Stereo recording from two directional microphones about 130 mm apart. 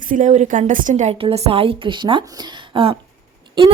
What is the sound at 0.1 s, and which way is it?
A woman's voice, 70° right (ahead or behind).